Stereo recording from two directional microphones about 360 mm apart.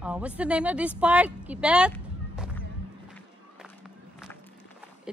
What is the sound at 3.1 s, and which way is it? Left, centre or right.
Music, centre.